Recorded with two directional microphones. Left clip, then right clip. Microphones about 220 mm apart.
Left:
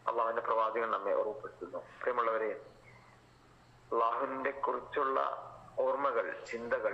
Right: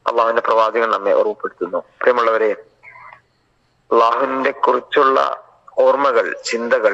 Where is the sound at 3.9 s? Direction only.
50° right (ahead or behind).